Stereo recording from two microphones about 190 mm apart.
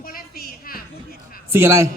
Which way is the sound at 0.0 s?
50° left (ahead or behind).